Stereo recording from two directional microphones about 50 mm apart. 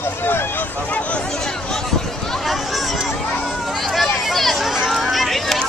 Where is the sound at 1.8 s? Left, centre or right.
Centre.